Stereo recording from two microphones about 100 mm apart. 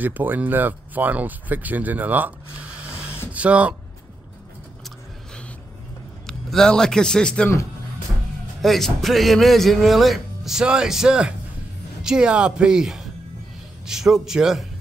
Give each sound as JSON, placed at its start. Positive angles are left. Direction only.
{"t": 0.0, "sound": "speech", "side_deg": -20}
{"t": 6.2, "sound": "a man's voice", "side_deg": 5}
{"t": 8.6, "sound": "speech", "side_deg": 0}